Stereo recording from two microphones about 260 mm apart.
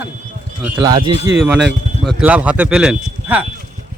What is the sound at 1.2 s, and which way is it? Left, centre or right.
Speech, centre.